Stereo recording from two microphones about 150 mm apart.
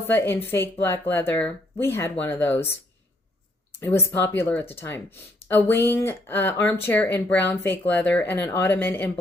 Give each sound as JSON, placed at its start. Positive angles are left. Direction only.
{"t": 0.1, "sound": "speech", "side_deg": 15}
{"t": 3.8, "sound": "speech", "side_deg": 15}